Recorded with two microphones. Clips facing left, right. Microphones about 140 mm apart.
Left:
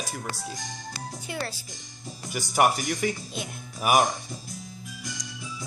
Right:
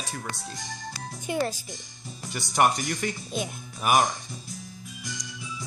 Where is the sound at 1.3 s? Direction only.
20° right (ahead or behind).